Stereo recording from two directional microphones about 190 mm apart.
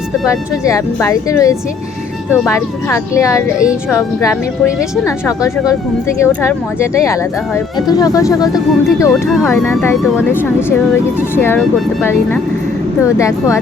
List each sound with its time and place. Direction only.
0.3 s speech: 15° left (ahead or behind)
9.9 s speech: centre (ahead or behind)
10.2 s speech: 10° left (ahead or behind)
13.0 s speech: 15° left (ahead or behind)